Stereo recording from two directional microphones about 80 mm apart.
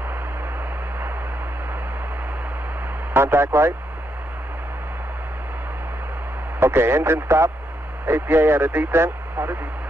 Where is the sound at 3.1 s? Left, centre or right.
Right.